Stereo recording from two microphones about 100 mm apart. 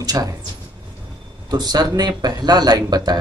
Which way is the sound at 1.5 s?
45° right (ahead or behind).